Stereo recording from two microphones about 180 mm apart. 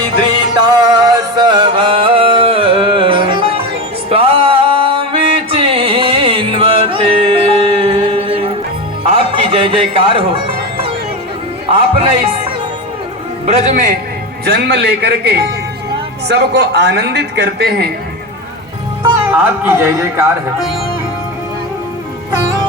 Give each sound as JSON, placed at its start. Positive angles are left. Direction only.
{"t": 0.2, "sound": "music", "side_deg": -25}
{"t": 9.5, "sound": "a sound", "side_deg": -30}
{"t": 13.4, "sound": "a man's voice", "side_deg": -40}
{"t": 14.4, "sound": "a man's voice", "side_deg": -65}
{"t": 19.3, "sound": "a man's voice", "side_deg": -10}